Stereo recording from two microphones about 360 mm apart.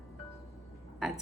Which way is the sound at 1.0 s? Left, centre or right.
Centre.